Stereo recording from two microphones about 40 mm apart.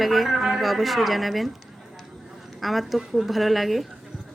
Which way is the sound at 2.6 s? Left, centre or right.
Centre.